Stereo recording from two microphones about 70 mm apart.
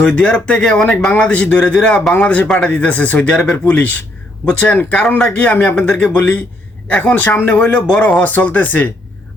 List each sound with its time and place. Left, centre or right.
0.0 s a man's voice: left